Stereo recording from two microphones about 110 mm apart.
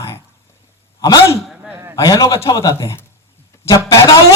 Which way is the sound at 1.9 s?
35° left (ahead or behind).